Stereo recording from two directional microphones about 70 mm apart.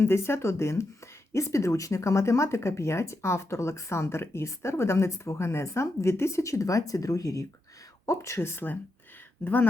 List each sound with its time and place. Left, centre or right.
0.0 s speech: left